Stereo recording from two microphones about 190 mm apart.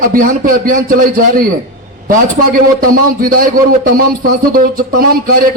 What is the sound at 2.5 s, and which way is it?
A man's voice, 50° right (ahead or behind).